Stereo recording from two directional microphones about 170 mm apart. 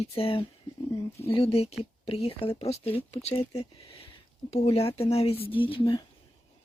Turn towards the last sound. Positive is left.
turn(degrees=30)  # may be behind; listen again after turning